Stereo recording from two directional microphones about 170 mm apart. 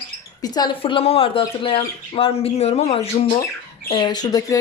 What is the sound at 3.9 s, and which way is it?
Speech, 25° left (ahead or behind).